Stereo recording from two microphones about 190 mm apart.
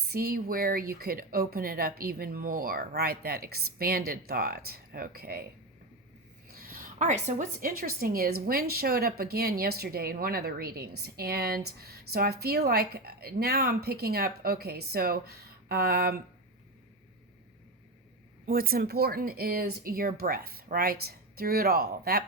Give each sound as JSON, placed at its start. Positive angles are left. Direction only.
{"t": 0.1, "sound": "speech", "side_deg": -55}
{"t": 6.5, "sound": "speech", "side_deg": -50}
{"t": 18.4, "sound": "speech", "side_deg": -50}